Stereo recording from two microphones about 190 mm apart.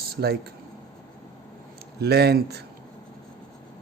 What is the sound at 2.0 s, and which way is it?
Speech, 60° right (ahead or behind).